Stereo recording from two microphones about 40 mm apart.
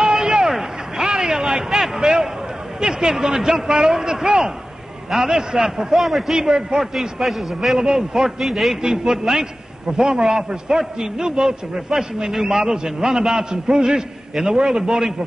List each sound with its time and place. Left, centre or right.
0.0 s a sound: centre
2.8 s a man's voice: centre
6.3 s a man's voice: centre
7.8 s a man's voice: centre